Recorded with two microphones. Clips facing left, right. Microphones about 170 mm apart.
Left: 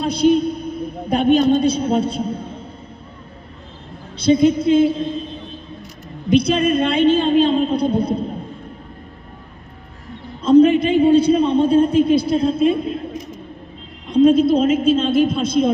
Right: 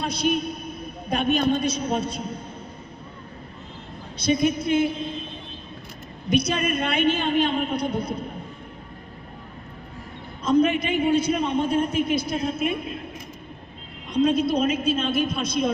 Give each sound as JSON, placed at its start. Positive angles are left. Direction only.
{"t": 0.0, "sound": "a sound", "side_deg": 30}
{"t": 1.0, "sound": "a man's voice", "side_deg": 30}
{"t": 4.2, "sound": "a woman's voice", "side_deg": 30}
{"t": 6.3, "sound": "a woman's voice", "side_deg": 30}
{"t": 10.4, "sound": "a man's voice", "side_deg": 30}
{"t": 14.1, "sound": "a woman's voice", "side_deg": 30}